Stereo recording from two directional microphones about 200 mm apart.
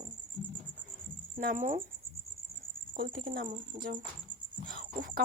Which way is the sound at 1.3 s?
40° right (ahead or behind).